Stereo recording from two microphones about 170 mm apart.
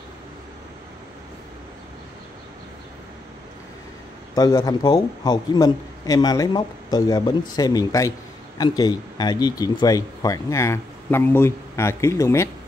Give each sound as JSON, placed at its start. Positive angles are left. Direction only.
{"t": 4.4, "sound": "a man's voice", "side_deg": 20}